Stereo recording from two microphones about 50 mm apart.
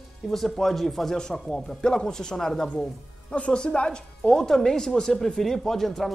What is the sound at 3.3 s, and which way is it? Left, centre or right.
Speech, left.